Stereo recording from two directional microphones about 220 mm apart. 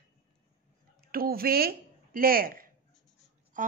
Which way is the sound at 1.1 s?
45° right (ahead or behind).